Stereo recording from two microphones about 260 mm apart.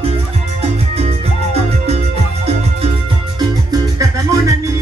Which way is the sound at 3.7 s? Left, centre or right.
Centre.